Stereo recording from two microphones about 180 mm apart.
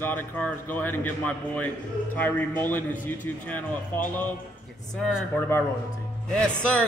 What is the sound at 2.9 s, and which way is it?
Speech, 45° left (ahead or behind).